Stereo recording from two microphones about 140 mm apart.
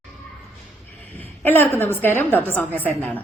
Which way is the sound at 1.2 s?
15° left (ahead or behind).